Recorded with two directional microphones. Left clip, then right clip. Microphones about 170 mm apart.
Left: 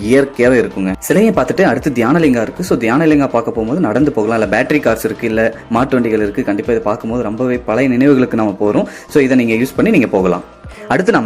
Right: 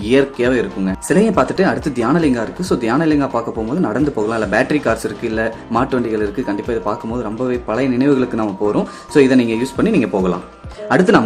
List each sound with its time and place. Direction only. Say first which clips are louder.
0.1 s speech: left 4 dB; 20° left (ahead or behind)